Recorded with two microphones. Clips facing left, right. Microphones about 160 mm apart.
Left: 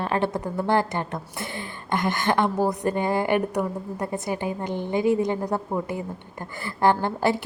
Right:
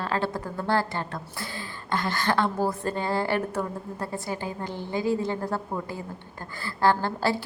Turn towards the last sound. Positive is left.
turn(degrees=20)  # may be behind; listen again after turning